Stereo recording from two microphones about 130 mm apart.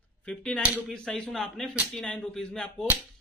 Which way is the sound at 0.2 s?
10° left (ahead or behind).